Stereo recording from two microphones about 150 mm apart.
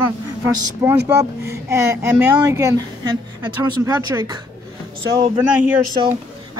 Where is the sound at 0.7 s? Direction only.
15° right (ahead or behind).